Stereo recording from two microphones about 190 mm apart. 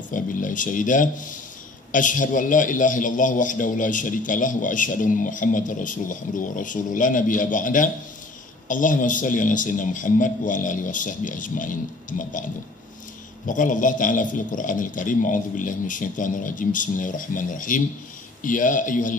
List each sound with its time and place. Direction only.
0.1 s a man's voice: 45° left (ahead or behind)
13.5 s a man's voice: 45° left (ahead or behind)